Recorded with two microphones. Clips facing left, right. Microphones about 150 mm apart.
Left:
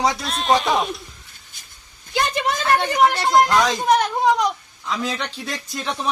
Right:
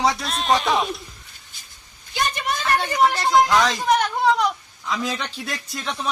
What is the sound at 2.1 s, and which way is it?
Speech, 90° left.